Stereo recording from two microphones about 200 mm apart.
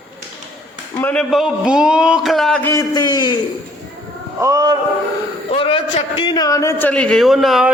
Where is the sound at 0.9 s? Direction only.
5° left (ahead or behind).